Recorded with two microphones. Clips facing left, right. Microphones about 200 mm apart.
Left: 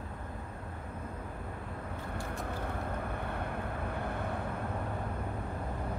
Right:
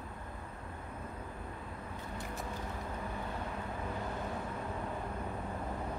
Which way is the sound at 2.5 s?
60° left (ahead or behind).